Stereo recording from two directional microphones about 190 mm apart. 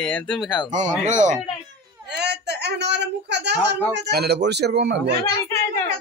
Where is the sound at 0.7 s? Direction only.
40° right (ahead or behind).